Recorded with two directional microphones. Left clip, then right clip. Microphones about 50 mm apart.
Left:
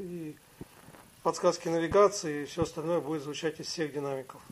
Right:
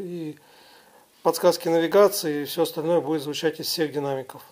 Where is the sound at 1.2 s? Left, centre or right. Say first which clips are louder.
Right 8 dB; centre.